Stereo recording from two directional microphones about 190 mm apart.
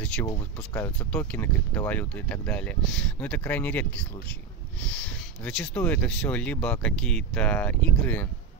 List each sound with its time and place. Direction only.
0.0 s speech: 5° left (ahead or behind)